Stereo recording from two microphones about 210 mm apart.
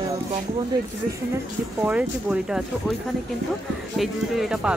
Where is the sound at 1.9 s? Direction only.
5° right (ahead or behind).